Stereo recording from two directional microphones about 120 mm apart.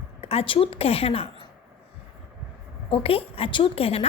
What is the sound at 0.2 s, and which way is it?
A woman's voice, 55° left (ahead or behind).